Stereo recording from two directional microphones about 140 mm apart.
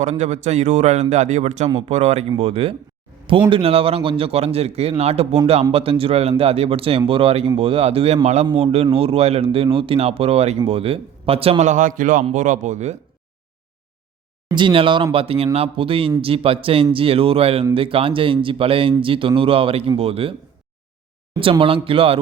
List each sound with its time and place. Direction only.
0.0 s a man's voice: 55° right (ahead or behind)
11.7 s a man's voice: 70° right (ahead or behind)
14.4 s speech: 35° right (ahead or behind)
21.6 s speech: 40° right (ahead or behind)